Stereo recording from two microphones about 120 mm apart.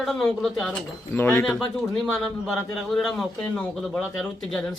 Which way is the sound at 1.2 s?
20° left (ahead or behind).